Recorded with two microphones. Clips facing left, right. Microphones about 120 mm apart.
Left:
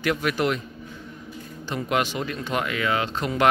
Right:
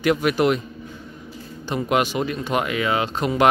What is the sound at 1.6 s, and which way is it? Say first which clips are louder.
Speech: right 4 dB; 15° right (ahead or behind).